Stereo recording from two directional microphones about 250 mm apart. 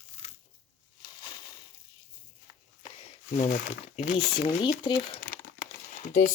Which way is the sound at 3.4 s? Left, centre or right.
Left.